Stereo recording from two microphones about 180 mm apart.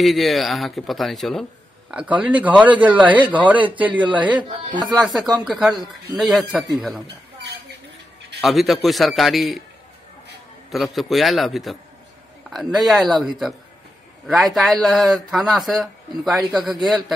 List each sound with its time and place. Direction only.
0.0 s a man's voice: centre (ahead or behind)
4.4 s speech: 25° right (ahead or behind)
5.0 s speech: centre (ahead or behind)
8.4 s speech: centre (ahead or behind)
10.7 s speech: centre (ahead or behind)